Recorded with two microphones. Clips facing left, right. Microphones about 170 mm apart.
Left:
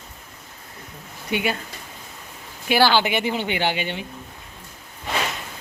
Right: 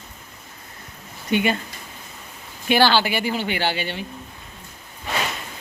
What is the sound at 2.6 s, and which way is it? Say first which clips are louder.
Speech: even; 10° left (ahead or behind).